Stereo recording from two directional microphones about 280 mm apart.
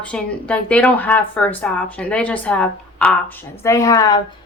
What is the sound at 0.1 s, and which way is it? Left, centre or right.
A woman's voice, centre.